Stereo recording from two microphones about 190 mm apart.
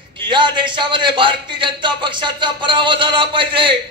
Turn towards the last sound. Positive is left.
turn(degrees=-25)  # may be behind; listen again after turning